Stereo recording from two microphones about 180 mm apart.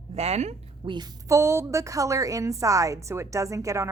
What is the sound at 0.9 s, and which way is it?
A woman's voice, 20° right (ahead or behind).